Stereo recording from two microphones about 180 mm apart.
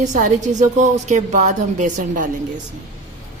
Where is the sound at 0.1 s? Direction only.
45° right (ahead or behind).